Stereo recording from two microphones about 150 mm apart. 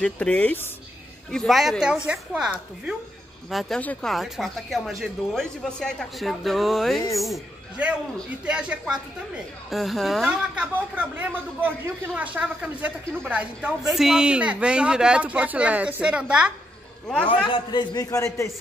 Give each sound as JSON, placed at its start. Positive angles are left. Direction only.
{"t": 0.0, "sound": "a woman's voice", "side_deg": 10}
{"t": 17.5, "sound": "a man's voice", "side_deg": 30}